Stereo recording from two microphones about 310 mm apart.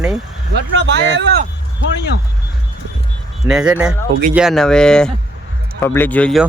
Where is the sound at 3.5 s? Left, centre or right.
Centre.